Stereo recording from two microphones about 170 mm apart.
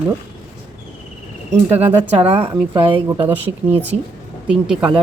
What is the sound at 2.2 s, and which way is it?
Speech, 35° right (ahead or behind).